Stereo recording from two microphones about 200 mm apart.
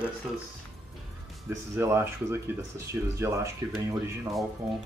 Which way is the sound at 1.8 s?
15° right (ahead or behind).